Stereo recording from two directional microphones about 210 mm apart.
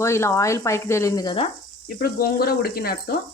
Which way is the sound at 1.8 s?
45° left (ahead or behind).